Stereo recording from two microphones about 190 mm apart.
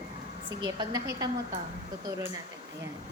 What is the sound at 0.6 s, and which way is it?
Speech, 20° right (ahead or behind).